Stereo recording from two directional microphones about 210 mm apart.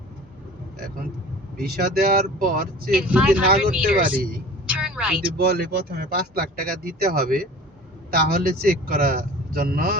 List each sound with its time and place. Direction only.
1.5 s speech: 45° right (ahead or behind)
2.9 s speech: 5° right (ahead or behind)
3.5 s speech: 45° right (ahead or behind)
4.6 s a sound: 5° right (ahead or behind)
5.4 s speech: 50° right (ahead or behind)
8.6 s speech: 45° right (ahead or behind)